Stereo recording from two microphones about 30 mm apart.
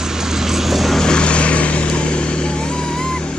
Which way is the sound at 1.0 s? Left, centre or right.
Left.